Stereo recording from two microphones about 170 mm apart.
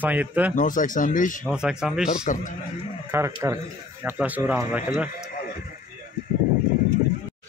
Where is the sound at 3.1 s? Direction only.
15° right (ahead or behind).